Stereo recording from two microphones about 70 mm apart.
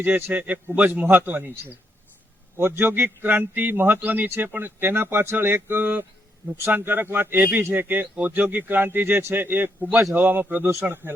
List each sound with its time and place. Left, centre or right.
0.3 s a man's voice: right